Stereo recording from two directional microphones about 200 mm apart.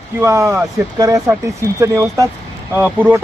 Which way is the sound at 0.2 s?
15° right (ahead or behind).